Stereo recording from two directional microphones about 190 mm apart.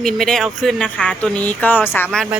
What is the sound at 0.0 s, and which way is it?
Speech, centre (ahead or behind).